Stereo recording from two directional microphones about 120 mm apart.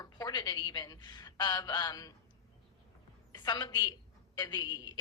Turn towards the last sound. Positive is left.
turn(degrees=35)  # may be behind; listen again after turning